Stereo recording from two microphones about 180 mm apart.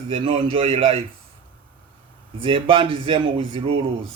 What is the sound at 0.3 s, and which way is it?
Speech, 30° right (ahead or behind).